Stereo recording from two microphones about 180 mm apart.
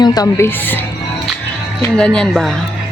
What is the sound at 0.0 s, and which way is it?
Speech, 20° left (ahead or behind).